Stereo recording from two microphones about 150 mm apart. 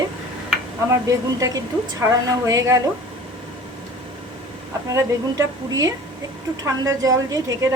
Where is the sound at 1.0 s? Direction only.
25° right (ahead or behind).